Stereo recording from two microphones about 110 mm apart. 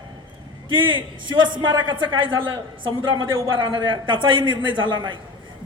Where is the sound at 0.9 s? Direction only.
45° right (ahead or behind).